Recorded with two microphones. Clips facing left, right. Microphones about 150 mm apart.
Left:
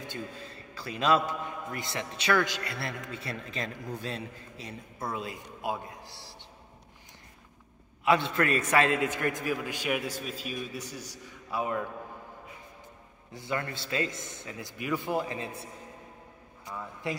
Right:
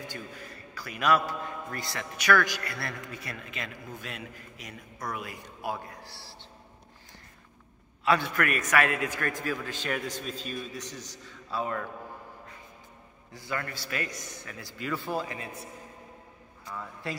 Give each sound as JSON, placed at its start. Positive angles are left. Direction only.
{"t": 0.1, "sound": "a man's voice", "side_deg": 25}
{"t": 8.0, "sound": "a man's voice", "side_deg": 20}
{"t": 13.3, "sound": "a man's voice", "side_deg": 25}
{"t": 16.6, "sound": "a man's voice", "side_deg": 20}